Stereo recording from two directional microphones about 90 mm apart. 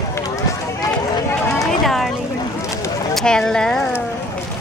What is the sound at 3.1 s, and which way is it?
Clip-clop, 5° left (ahead or behind).